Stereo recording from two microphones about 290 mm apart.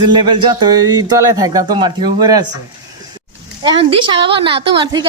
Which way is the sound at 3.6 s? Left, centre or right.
Centre.